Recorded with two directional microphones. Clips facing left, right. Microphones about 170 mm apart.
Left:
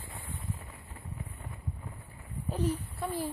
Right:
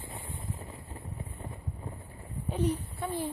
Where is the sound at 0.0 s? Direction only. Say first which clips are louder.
Right 2 dB; 25° right (ahead or behind).